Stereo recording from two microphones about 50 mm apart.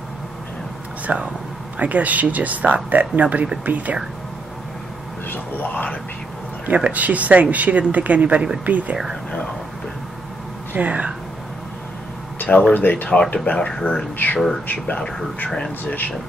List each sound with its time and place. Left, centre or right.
1.0 s speech: right
1.8 s speech: right
5.3 s a sound: left
6.6 s speech: right
10.7 s speech: right
12.4 s a sound: left
12.7 s speech: left
14.1 s speech: left